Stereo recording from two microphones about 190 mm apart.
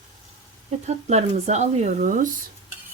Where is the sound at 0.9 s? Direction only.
35° right (ahead or behind).